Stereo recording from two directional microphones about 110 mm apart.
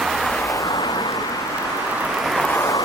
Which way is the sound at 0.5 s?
30° left (ahead or behind).